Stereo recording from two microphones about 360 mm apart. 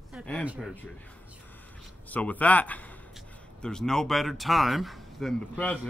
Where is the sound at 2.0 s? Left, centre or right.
Centre.